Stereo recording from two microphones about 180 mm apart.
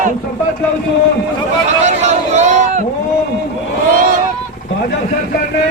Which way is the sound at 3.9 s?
50° right (ahead or behind).